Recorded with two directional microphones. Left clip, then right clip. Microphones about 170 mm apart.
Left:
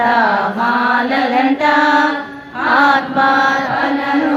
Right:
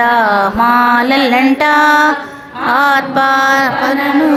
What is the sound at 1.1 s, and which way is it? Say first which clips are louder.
Music: right 3 dB; 30° right (ahead or behind).